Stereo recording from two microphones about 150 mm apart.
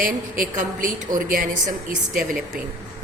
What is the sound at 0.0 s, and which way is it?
A woman's voice, 65° right (ahead or behind).